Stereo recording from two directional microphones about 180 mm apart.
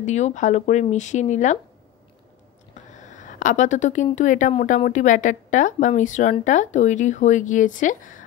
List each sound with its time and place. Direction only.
0.0 s speech: 40° left (ahead or behind)
2.7 s speech: 45° left (ahead or behind)